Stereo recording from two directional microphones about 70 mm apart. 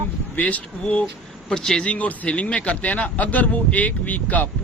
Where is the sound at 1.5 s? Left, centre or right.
Centre.